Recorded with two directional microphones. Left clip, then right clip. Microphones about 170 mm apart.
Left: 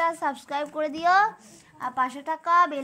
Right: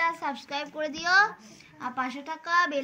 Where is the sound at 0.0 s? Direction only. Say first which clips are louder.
Left 3 dB; 45° left (ahead or behind).